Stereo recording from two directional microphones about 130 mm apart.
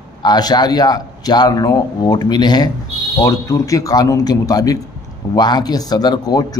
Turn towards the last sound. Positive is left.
turn(degrees=30)  # may be behind; listen again after turning